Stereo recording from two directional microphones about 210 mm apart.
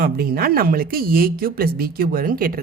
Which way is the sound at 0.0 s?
45° right (ahead or behind).